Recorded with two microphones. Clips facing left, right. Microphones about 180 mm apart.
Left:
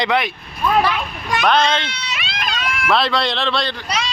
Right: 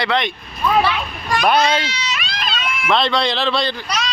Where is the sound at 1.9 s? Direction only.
55° left (ahead or behind).